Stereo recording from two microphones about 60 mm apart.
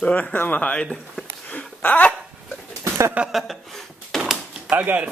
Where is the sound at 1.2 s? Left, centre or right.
Left.